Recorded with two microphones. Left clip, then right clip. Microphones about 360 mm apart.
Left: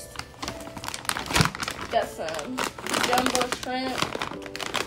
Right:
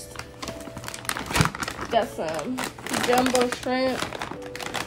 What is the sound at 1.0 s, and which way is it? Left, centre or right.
Crumpling, centre.